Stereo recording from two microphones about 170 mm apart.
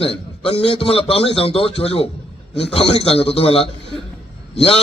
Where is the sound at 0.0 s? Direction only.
35° left (ahead or behind).